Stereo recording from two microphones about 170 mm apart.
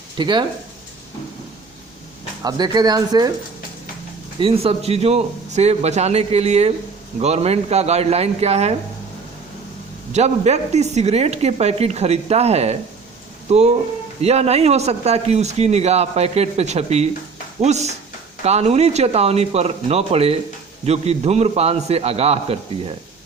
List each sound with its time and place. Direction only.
0.2 s speech: 25° right (ahead or behind)
2.4 s speech: 25° right (ahead or behind)
4.4 s speech: 35° right (ahead or behind)
10.1 s speech: 40° right (ahead or behind)